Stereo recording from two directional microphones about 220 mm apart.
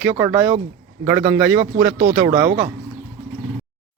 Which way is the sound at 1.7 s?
25° right (ahead or behind).